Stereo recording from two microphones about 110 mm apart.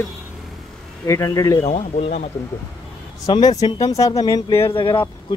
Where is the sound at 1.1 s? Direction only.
30° left (ahead or behind).